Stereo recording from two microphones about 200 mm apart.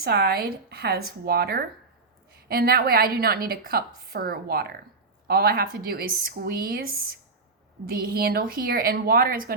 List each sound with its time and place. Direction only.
0.0 s a woman's voice: 50° right (ahead or behind)